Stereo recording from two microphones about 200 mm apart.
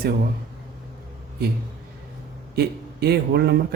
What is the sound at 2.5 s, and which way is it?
A man's voice, 55° right (ahead or behind).